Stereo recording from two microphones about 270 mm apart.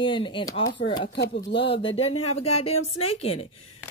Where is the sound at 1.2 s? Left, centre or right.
Left.